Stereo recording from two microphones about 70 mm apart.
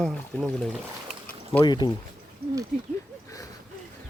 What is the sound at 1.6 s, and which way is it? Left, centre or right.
Speech, left.